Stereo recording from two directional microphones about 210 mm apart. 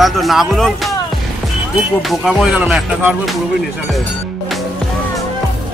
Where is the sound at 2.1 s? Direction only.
Centre (ahead or behind).